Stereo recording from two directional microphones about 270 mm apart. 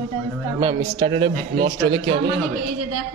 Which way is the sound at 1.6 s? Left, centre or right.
Right.